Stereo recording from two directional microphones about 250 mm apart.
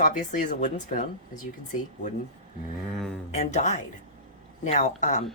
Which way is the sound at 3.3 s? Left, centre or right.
Left.